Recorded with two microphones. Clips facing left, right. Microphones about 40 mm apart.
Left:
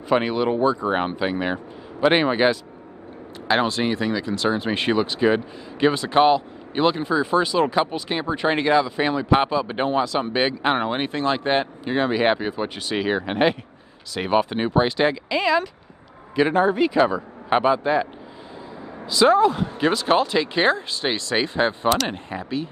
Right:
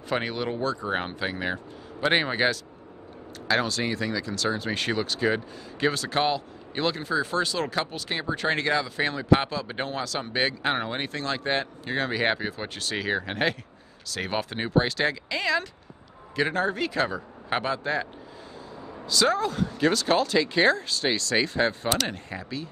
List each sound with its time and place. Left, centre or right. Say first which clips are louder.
0.1 s speech: left 8 dB; centre
3.4 s speech: left 5 dB; left
11.8 s speech: left 6 dB; centre
19.0 s speech: left 8 dB; left